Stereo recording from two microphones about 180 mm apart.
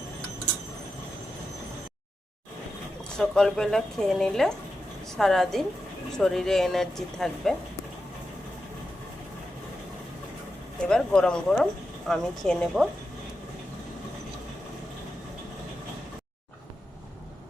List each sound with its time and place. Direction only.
3.2 s speech: 5° left (ahead or behind)
10.8 s speech: 5° left (ahead or behind)